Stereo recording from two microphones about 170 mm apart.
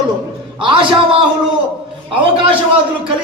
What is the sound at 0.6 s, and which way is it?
Speech, 30° right (ahead or behind).